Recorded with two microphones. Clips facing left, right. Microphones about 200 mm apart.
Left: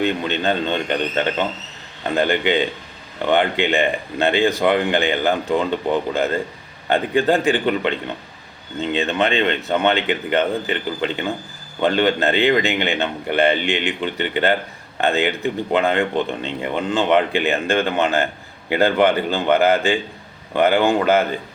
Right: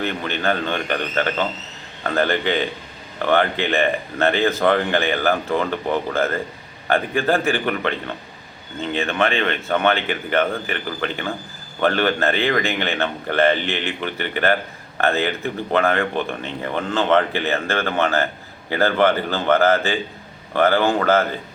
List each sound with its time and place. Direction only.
0.0 s speech: 20° left (ahead or behind)